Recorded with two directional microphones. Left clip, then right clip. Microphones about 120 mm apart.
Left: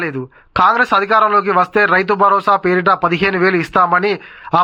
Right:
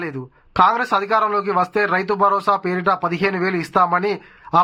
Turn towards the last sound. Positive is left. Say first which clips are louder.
# left 5 dB
turn(degrees=25)  # may be behind; listen again after turning